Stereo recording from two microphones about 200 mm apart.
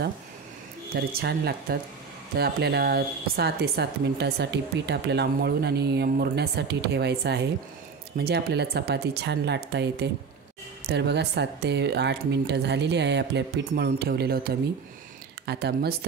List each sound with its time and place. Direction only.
0.9 s a woman's voice: 50° right (ahead or behind)
15.4 s speech: 55° right (ahead or behind)